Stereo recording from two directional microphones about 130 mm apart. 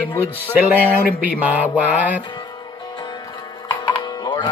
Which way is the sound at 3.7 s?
35° left (ahead or behind).